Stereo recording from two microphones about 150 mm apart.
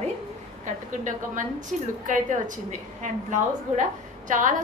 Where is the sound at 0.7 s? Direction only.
55° right (ahead or behind).